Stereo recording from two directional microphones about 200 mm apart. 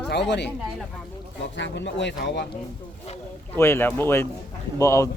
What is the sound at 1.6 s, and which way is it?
Speech, 65° left (ahead or behind).